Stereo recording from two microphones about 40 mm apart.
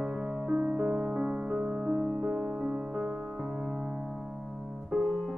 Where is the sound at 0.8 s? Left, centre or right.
Centre.